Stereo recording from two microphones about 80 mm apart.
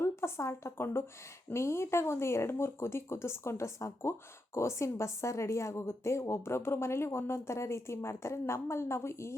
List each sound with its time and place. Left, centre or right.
0.0 s a woman's voice: left